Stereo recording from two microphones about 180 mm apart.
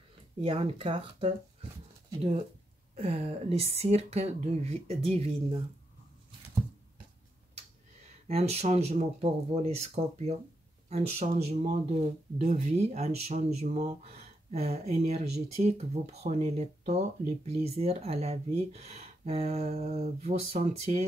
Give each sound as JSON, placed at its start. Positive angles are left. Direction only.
{"t": 0.4, "sound": "speech", "side_deg": -35}
{"t": 8.3, "sound": "speech", "side_deg": -35}